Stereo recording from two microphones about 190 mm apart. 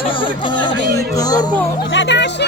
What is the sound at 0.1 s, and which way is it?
Music, 25° left (ahead or behind).